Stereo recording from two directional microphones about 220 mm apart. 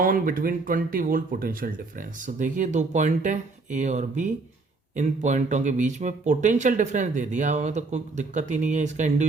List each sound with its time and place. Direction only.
0.0 s speech: 40° right (ahead or behind)